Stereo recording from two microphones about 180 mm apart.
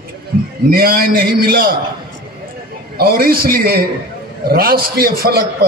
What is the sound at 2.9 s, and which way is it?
A man's voice, 55° right (ahead or behind).